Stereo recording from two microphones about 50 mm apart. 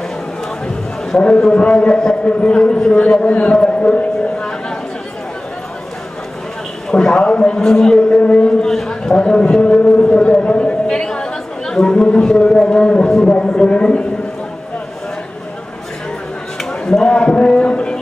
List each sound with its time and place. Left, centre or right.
1.1 s a man's voice: centre
3.3 s a man's voice: left
3.5 s a sound: centre
6.9 s a man's voice: centre
8.2 s a sound: centre
9.6 s a man's voice: left
10.0 s chatter: centre
12.4 s a man's voice: centre
16.5 s a sound: centre